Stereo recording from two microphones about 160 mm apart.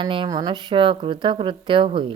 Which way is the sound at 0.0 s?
30° right (ahead or behind).